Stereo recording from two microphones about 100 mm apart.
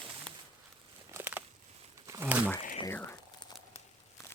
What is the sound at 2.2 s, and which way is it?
Speech, 15° right (ahead or behind).